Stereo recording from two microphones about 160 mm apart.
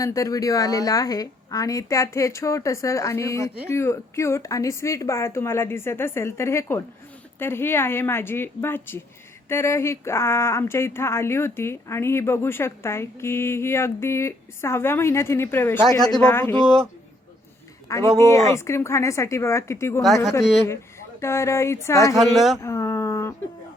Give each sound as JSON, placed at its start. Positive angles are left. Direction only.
{"t": 0.0, "sound": "a woman's voice", "side_deg": 20}
{"t": 15.9, "sound": "a woman's voice", "side_deg": 25}
{"t": 16.1, "sound": "speech", "side_deg": 10}
{"t": 17.8, "sound": "speech", "side_deg": 20}
{"t": 20.0, "sound": "a woman's voice", "side_deg": 0}
{"t": 21.2, "sound": "speech", "side_deg": 15}
{"t": 22.1, "sound": "a woman's voice", "side_deg": 0}
{"t": 22.6, "sound": "a sound", "side_deg": 20}